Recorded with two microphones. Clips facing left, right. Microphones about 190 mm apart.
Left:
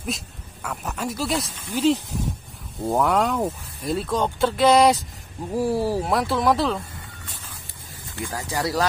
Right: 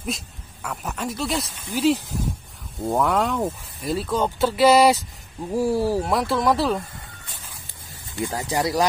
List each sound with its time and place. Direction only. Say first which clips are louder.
0.0 s speech: even; centre (ahead or behind)
8.2 s speech: right 3 dB; 20° right (ahead or behind)